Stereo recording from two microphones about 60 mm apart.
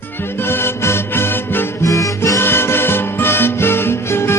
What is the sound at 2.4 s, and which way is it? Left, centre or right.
Music, left.